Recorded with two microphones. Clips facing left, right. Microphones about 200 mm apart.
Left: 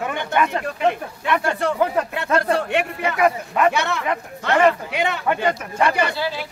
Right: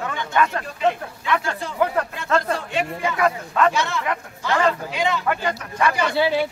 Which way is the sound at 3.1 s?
15° left (ahead or behind).